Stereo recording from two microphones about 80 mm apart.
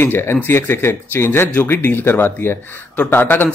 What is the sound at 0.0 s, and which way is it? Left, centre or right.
A man's voice, left.